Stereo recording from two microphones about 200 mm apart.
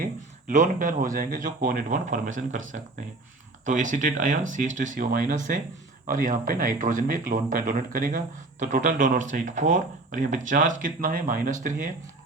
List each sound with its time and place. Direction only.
0.0 s speech: 40° right (ahead or behind)
3.7 s speech: 40° right (ahead or behind)